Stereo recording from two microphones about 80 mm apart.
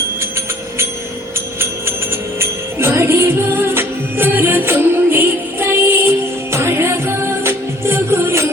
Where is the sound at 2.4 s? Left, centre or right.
Right.